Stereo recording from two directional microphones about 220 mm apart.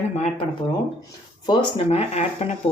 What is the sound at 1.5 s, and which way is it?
Speech, 20° left (ahead or behind).